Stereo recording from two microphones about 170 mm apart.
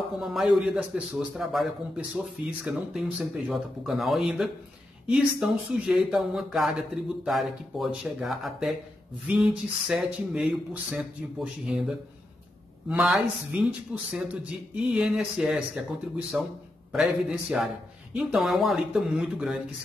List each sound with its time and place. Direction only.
0.2 s a man's voice: centre (ahead or behind)
12.9 s a man's voice: 5° right (ahead or behind)